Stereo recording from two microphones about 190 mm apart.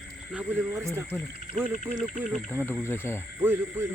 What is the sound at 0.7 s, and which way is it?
Speech, 15° right (ahead or behind).